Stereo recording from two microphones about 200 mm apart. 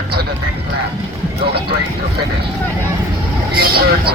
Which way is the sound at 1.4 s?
55° right (ahead or behind).